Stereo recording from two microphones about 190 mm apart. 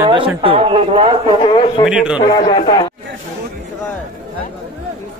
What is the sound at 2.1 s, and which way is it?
Speech, 25° left (ahead or behind).